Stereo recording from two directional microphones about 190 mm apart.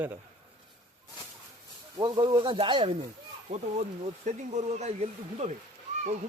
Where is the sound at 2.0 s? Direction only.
20° right (ahead or behind).